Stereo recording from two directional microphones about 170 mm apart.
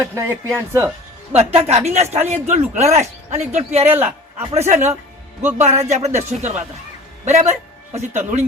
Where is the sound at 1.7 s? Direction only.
40° right (ahead or behind).